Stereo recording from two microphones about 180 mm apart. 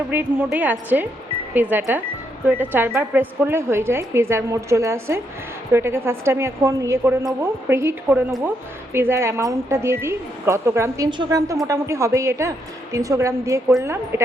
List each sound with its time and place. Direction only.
0.1 s speech: 10° right (ahead or behind)